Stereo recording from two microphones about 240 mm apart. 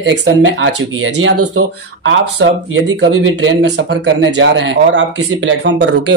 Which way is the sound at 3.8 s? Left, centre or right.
Right.